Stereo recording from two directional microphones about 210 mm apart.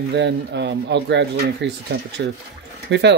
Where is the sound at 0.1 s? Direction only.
55° right (ahead or behind).